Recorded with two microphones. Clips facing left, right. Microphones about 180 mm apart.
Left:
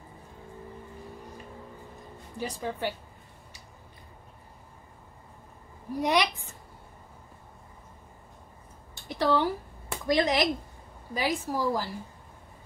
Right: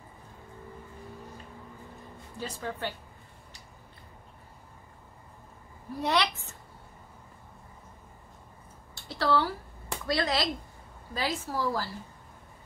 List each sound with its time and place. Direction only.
2.3 s a woman's voice: 15° left (ahead or behind)
5.9 s a woman's voice: 15° left (ahead or behind)
8.9 s a sound: 15° left (ahead or behind)
10.0 s a woman's voice: 15° left (ahead or behind)